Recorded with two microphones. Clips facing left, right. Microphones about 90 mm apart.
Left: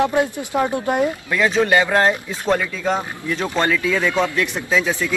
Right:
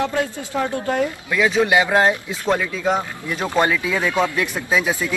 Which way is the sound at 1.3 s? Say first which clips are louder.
Right 1 dB; 5° right (ahead or behind).